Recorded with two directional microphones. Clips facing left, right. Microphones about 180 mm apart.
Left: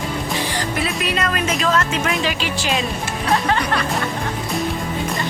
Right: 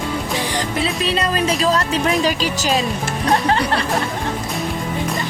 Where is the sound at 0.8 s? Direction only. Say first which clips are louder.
Right 2 dB; 30° right (ahead or behind).